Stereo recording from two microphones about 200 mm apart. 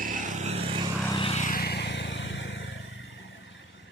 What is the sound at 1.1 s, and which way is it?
Vehicle, 30° left (ahead or behind).